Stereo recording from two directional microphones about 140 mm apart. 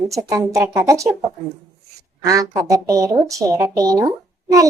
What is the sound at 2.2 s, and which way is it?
Speech, 25° right (ahead or behind).